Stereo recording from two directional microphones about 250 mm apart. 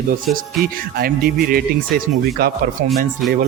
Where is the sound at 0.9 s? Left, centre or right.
Right.